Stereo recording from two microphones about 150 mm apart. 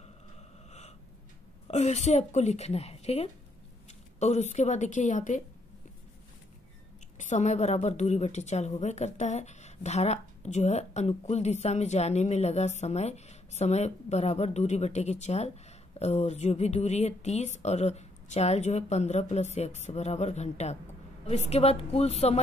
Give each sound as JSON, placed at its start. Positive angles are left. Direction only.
{"t": 0.7, "sound": "gasp", "side_deg": 50}
{"t": 1.7, "sound": "a woman's voice", "side_deg": 45}
{"t": 7.2, "sound": "a woman's voice", "side_deg": 55}